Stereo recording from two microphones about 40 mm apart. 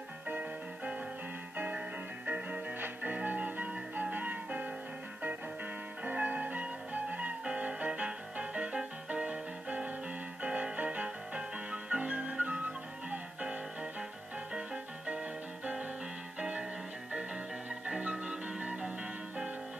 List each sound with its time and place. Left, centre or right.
2.2 s music: right
2.8 s music: right
6.0 s music: right
15.0 s music: right
17.9 s music: right